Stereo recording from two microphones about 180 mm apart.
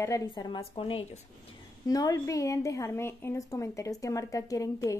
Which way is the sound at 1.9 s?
20° left (ahead or behind).